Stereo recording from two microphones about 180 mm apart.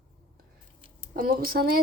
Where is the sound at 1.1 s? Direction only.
50° right (ahead or behind).